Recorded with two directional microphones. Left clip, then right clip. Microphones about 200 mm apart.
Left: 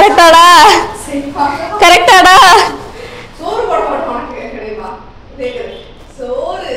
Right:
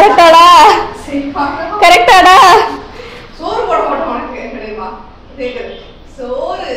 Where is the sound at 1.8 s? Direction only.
20° left (ahead or behind).